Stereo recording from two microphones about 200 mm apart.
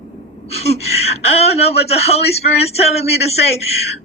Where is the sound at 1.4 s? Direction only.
30° left (ahead or behind).